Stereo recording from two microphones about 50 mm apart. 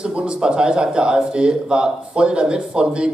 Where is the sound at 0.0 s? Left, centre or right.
Right.